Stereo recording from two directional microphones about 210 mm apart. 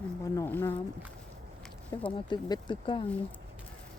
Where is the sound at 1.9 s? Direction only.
20° left (ahead or behind).